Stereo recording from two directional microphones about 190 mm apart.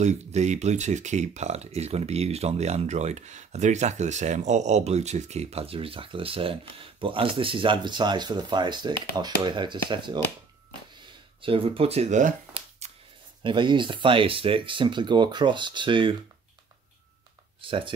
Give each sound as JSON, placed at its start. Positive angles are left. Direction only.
{"t": 0.0, "sound": "speech", "side_deg": -35}
{"t": 11.4, "sound": "speech", "side_deg": -30}
{"t": 12.8, "sound": "a sound", "side_deg": -35}
{"t": 13.4, "sound": "speech", "side_deg": -25}
{"t": 17.6, "sound": "speech", "side_deg": -25}